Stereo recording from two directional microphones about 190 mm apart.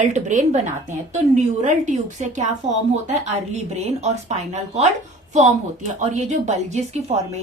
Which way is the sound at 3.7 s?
35° right (ahead or behind).